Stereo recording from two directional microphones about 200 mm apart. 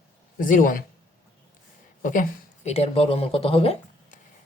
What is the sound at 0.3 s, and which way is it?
Speech, 45° left (ahead or behind).